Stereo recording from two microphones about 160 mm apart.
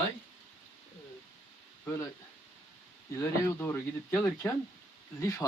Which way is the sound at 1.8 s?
20° left (ahead or behind).